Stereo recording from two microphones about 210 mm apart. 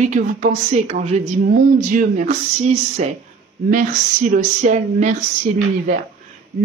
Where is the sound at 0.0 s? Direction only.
35° right (ahead or behind).